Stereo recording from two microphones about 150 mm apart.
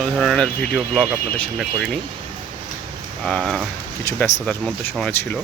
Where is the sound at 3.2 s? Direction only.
5° left (ahead or behind).